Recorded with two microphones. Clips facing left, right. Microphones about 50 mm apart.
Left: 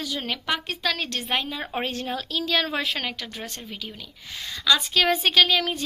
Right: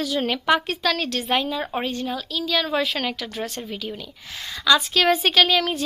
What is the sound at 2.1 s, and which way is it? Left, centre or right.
Speech, left.